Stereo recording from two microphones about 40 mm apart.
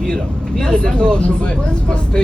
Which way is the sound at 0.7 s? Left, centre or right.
Left.